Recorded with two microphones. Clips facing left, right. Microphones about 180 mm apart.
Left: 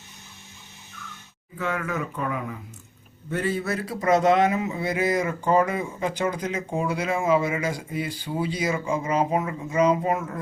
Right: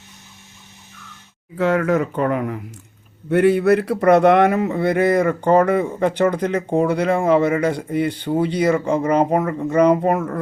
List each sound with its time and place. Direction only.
1.5 s speech: 70° right (ahead or behind); by 10.4 s 55° right (ahead or behind)